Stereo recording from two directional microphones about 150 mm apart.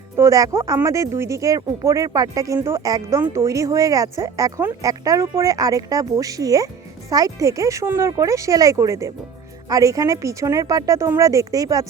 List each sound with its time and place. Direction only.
0.2 s speech: 20° right (ahead or behind)